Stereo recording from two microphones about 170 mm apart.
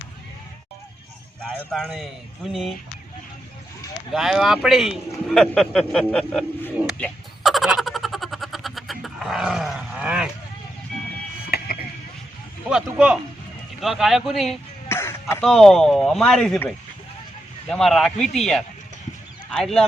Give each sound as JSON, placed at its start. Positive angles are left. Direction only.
{"t": 1.4, "sound": "speech", "side_deg": 5}
{"t": 4.1, "sound": "speech", "side_deg": 0}
{"t": 7.0, "sound": "a sound", "side_deg": 0}
{"t": 11.5, "sound": "a sound", "side_deg": 60}
{"t": 12.6, "sound": "speech", "side_deg": -5}
{"t": 14.8, "sound": "throat clearing", "side_deg": 15}
{"t": 15.4, "sound": "speech", "side_deg": 0}